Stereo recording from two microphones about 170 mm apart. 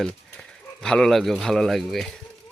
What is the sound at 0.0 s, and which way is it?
Speech, 5° left (ahead or behind).